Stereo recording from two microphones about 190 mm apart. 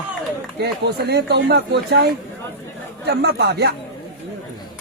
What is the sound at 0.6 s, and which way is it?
Speech, 60° right (ahead or behind).